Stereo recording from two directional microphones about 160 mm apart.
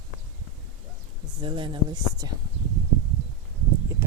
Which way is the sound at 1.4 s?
30° right (ahead or behind).